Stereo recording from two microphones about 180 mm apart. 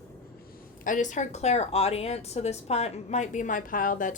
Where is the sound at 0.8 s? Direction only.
45° left (ahead or behind).